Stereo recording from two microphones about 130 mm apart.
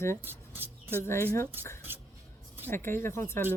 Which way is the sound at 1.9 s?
15° right (ahead or behind).